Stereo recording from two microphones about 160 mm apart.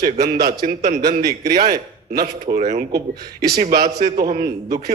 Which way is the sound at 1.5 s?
70° right (ahead or behind).